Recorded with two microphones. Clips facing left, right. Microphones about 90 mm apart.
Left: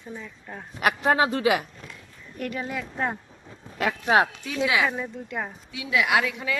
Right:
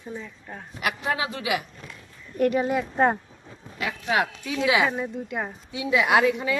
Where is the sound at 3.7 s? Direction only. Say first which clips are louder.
Left 4 dB; 55° left (ahead or behind).